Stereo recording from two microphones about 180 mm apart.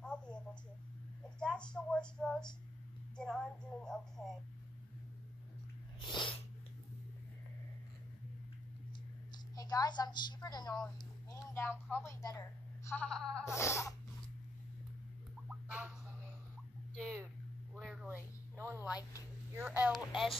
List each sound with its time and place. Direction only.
0.0 s a sound: 5° left (ahead or behind)
1.4 s speech: 5° left (ahead or behind)
5.9 s sneeze: 25° left (ahead or behind)
9.6 s a woman's voice: 20° left (ahead or behind); by 13.4 s 5° left (ahead or behind)
13.5 s a woman's voice: 15° left (ahead or behind)
15.4 s a sound: 10° right (ahead or behind)
17.7 s speech: 5° right (ahead or behind)